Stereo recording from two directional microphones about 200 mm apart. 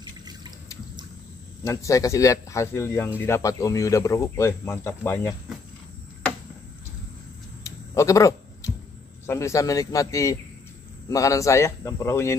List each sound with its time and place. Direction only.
1.6 s speech: 15° left (ahead or behind)
7.6 s a sound: 15° left (ahead or behind)
9.2 s speech: 15° left (ahead or behind)